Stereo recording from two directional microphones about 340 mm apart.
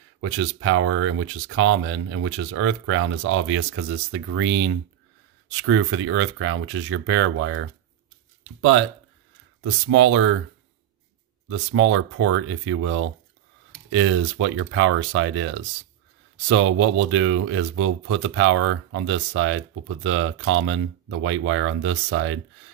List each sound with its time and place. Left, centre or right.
0.2 s speech: right
11.4 s speech: right